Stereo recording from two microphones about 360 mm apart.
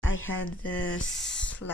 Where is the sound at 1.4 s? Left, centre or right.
Left.